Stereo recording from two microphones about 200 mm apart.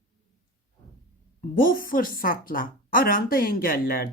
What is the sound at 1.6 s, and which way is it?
Speech, 45° left (ahead or behind).